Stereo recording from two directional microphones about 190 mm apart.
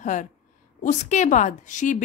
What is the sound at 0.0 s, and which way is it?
A woman's voice, 40° left (ahead or behind).